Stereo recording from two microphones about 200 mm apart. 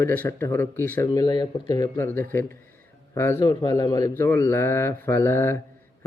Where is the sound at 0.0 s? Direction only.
10° left (ahead or behind).